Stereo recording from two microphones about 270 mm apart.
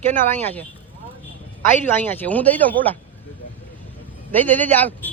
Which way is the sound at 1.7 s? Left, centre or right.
Centre.